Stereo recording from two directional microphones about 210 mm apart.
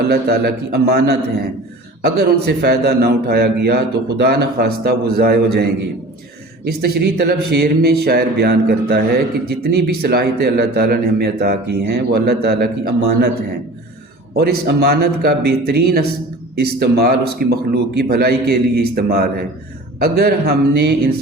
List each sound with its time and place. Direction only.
0.1 s speech: 50° right (ahead or behind)
6.7 s speech: 50° right (ahead or behind)
14.3 s speech: 50° right (ahead or behind)